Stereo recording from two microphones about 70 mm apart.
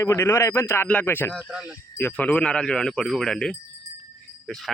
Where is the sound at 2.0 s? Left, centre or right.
Left.